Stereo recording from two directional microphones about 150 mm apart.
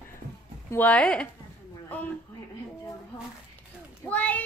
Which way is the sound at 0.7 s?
10° left (ahead or behind).